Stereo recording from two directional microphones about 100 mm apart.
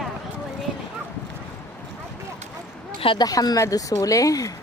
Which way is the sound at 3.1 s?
40° left (ahead or behind).